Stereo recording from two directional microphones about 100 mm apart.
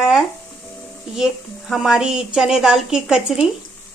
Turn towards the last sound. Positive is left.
turn(degrees=-5)  # may be behind; listen again after turning